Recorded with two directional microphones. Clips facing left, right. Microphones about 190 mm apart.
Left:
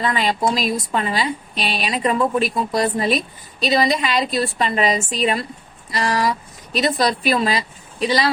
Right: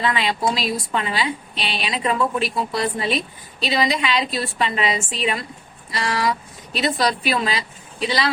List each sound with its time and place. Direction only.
0.0 s a woman's voice: 40° left (ahead or behind)